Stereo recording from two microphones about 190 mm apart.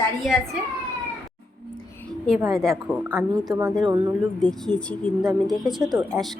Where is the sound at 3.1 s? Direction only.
15° right (ahead or behind).